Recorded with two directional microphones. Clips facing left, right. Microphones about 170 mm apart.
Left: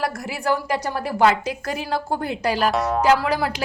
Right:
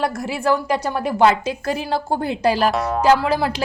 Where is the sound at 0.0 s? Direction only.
25° right (ahead or behind).